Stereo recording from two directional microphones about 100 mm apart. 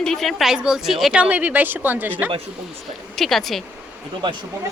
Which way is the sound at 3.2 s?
Centre (ahead or behind).